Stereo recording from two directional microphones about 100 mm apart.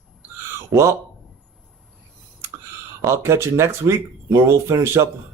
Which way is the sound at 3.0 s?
25° right (ahead or behind).